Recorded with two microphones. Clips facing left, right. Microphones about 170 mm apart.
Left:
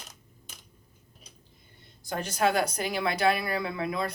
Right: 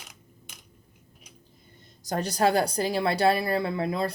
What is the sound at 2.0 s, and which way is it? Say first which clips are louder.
Speech: right 3 dB; 35° right (ahead or behind).